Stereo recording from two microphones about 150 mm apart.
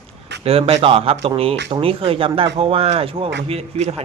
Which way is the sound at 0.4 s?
40° right (ahead or behind).